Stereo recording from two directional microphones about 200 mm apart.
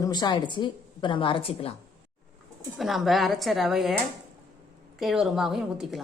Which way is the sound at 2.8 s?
Centre (ahead or behind).